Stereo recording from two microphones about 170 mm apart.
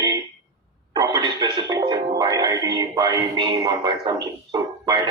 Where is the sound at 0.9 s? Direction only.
25° right (ahead or behind).